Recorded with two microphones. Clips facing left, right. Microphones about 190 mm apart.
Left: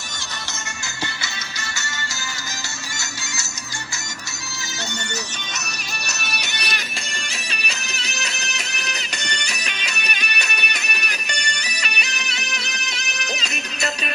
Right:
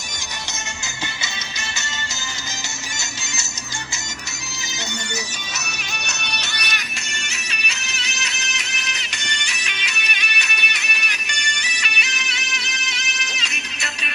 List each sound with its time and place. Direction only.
6.1 s music: 5° left (ahead or behind)
6.5 s music: 30° left (ahead or behind)